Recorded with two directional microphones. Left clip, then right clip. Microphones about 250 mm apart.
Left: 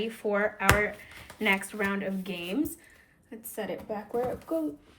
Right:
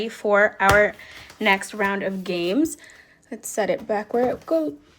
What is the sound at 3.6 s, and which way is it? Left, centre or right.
Speech, right.